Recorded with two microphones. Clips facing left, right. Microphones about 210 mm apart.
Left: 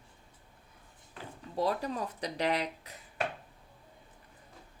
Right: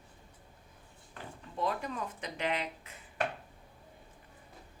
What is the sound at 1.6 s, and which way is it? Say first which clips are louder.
Speech: left 3 dB; 35° left (ahead or behind).